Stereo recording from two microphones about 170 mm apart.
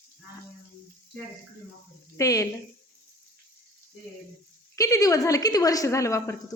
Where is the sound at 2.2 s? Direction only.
20° left (ahead or behind).